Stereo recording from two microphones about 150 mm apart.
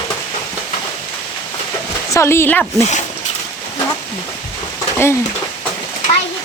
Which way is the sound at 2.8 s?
50° left (ahead or behind).